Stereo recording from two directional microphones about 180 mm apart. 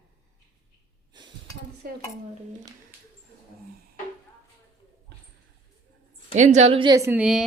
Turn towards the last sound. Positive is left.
turn(degrees=-5)  # may be behind; listen again after turning